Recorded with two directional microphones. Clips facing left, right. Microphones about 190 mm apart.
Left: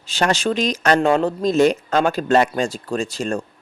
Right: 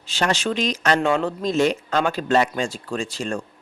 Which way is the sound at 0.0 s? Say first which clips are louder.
Left 3 dB; 40° left (ahead or behind).